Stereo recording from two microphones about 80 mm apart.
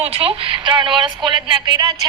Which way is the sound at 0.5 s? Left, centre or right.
Right.